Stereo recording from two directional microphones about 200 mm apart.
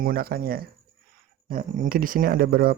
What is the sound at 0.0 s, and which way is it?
Speech, 45° right (ahead or behind).